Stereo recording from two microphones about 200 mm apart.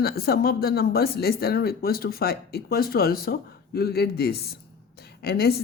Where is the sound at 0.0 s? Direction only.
50° left (ahead or behind).